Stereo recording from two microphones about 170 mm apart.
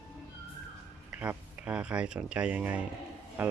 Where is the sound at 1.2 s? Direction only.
10° right (ahead or behind).